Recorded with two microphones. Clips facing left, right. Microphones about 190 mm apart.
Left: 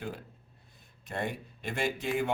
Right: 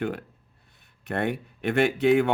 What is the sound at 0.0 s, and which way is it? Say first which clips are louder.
Speech: right 10 dB; 65° right (ahead or behind).